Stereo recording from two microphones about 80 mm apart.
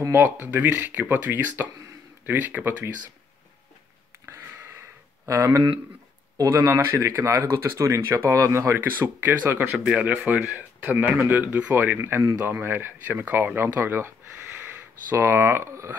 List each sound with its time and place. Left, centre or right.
0.0 s speech: right
4.3 s a sound: right
6.3 s speech: right